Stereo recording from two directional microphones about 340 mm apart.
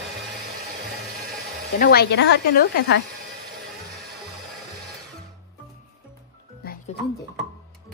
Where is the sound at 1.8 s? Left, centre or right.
Left.